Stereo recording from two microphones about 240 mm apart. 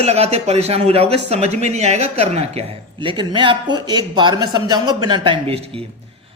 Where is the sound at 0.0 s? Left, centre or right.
Right.